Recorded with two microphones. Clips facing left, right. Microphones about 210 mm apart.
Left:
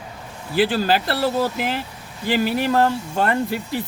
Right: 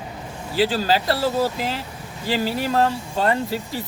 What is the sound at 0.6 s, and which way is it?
Speech, 55° left (ahead or behind).